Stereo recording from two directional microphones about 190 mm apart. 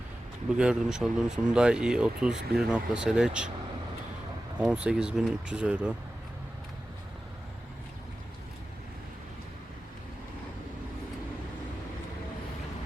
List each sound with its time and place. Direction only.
0.5 s speech: 5° right (ahead or behind)
4.6 s speech: 5° right (ahead or behind)